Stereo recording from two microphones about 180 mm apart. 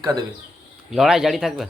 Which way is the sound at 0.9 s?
Centre (ahead or behind).